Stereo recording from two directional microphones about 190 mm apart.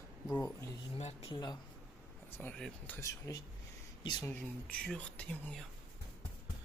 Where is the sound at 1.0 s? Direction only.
35° left (ahead or behind).